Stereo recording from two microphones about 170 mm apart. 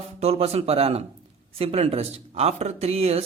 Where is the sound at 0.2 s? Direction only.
35° right (ahead or behind).